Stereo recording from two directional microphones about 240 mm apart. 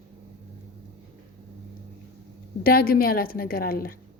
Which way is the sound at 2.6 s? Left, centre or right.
Left.